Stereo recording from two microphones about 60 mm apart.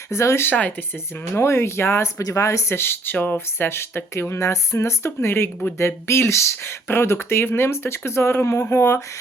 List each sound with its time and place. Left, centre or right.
0.1 s speech: left